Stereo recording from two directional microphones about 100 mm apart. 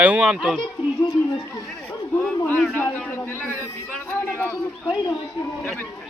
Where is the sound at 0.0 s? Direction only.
10° right (ahead or behind).